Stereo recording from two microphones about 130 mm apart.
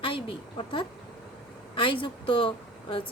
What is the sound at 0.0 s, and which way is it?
A woman's voice, 40° left (ahead or behind).